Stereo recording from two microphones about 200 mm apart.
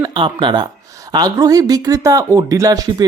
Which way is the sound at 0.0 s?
25° right (ahead or behind).